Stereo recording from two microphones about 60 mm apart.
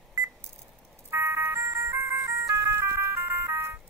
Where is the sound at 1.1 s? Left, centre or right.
Right.